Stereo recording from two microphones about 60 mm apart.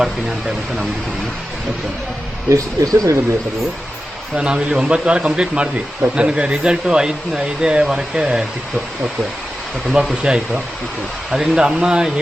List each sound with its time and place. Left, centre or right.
0.0 s speech: centre
2.5 s speech: right
4.4 s speech: centre
9.9 s speech: centre